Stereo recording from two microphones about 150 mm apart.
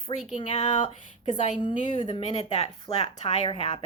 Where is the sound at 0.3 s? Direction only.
45° left (ahead or behind).